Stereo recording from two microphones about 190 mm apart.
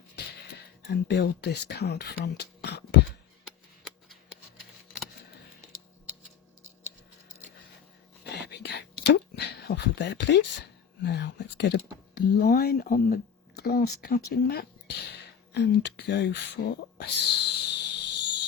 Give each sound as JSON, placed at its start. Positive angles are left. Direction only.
{"t": 0.2, "sound": "music", "side_deg": 60}
{"t": 0.9, "sound": "speech", "side_deg": 65}
{"t": 8.2, "sound": "a sound", "side_deg": 60}
{"t": 9.0, "sound": "speech", "side_deg": 60}
{"t": 13.6, "sound": "speech", "side_deg": 55}